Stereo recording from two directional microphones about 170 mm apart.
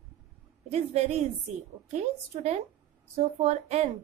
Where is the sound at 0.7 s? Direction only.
40° right (ahead or behind).